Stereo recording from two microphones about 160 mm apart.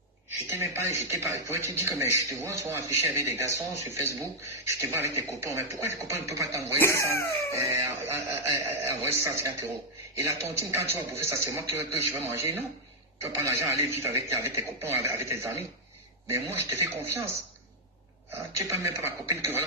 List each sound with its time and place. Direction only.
0.7 s speech: 20° right (ahead or behind)
6.8 s cough: 15° left (ahead or behind)
7.5 s speech: 20° right (ahead or behind)
18.7 s speech: 15° right (ahead or behind)